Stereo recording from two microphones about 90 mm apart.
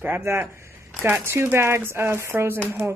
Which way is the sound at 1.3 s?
30° right (ahead or behind).